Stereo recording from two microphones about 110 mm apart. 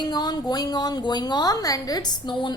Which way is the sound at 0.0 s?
40° left (ahead or behind).